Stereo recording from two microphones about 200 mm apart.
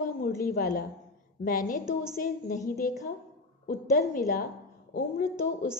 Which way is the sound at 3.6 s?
40° left (ahead or behind).